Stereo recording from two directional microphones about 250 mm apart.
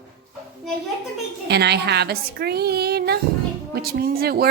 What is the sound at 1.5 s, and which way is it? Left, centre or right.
A woman's voice, right.